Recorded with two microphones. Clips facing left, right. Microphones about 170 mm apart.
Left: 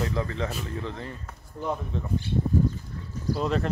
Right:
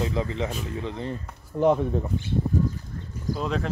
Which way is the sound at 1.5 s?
70° right (ahead or behind).